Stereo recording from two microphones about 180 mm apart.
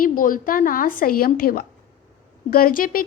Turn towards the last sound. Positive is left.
turn(degrees=50)  # may be behind; listen again after turning